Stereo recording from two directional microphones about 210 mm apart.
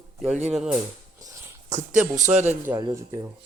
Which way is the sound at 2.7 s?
15° right (ahead or behind).